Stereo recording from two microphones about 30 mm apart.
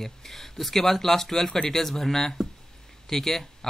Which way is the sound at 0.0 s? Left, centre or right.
Centre.